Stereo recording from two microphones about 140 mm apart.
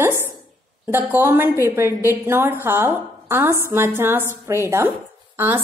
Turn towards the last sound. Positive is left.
turn(degrees=-15)  # may be behind; listen again after turning